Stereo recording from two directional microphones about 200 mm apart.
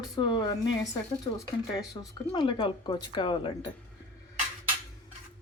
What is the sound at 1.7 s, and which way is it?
Speech, 20° left (ahead or behind).